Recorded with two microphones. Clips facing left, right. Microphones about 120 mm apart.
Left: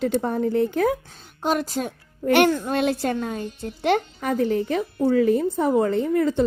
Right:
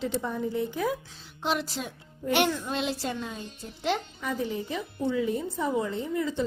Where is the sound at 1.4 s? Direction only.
45° left (ahead or behind).